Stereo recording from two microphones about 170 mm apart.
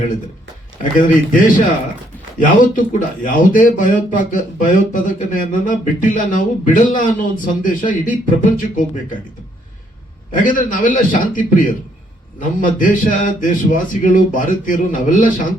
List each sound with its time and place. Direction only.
0.8 s speech: 55° left (ahead or behind)
10.3 s speech: 55° left (ahead or behind)